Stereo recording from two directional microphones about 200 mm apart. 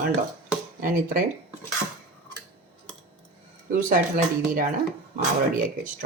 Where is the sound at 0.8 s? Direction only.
45° right (ahead or behind).